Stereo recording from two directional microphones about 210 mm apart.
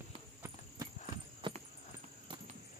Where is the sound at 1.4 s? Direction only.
25° right (ahead or behind).